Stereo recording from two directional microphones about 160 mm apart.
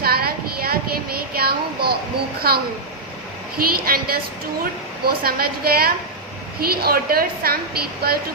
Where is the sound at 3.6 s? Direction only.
65° right (ahead or behind).